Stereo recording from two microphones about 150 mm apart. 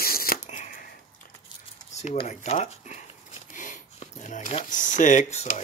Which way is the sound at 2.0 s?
50° left (ahead or behind).